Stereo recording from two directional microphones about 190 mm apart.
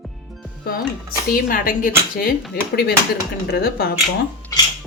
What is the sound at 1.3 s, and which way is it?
Speech, 50° left (ahead or behind).